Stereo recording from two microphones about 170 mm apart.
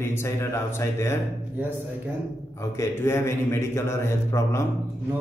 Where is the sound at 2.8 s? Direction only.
15° left (ahead or behind).